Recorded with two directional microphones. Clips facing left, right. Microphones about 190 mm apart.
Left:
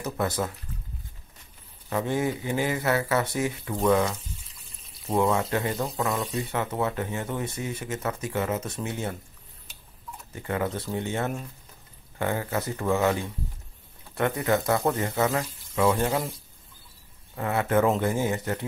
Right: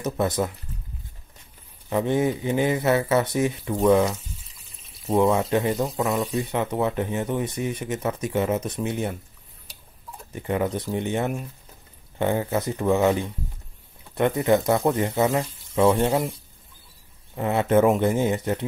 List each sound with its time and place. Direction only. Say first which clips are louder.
0.0 s speech: right 4 dB; 20° right (ahead or behind)
1.9 s speech: right 4 dB; 20° right (ahead or behind)
4.1 s water: right 2 dB; centre (ahead or behind)
5.3 s speech: right 4 dB; 20° right (ahead or behind)
5.8 s speech: right 4 dB; centre (ahead or behind)
6.3 s speech: right 4 dB; 20° right (ahead or behind)
10.3 s speech: right 4 dB; 20° right (ahead or behind)
17.4 s speech: right 4 dB; 20° right (ahead or behind)